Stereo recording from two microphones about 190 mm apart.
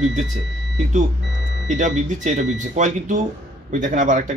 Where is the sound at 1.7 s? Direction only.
40° right (ahead or behind).